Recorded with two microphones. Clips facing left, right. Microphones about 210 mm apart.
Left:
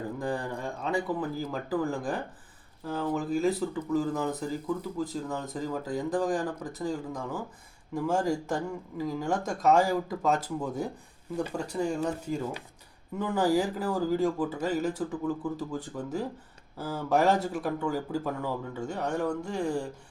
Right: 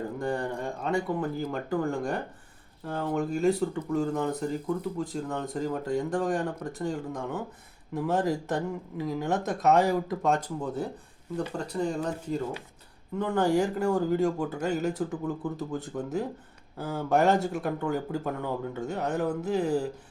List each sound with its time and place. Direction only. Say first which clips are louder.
0.2 s a man's voice: right 3 dB; centre (ahead or behind)